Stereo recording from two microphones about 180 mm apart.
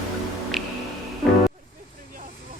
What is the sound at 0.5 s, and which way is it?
Music, centre (ahead or behind).